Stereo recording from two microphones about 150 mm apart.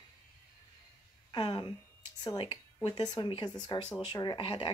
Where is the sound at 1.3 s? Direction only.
30° left (ahead or behind).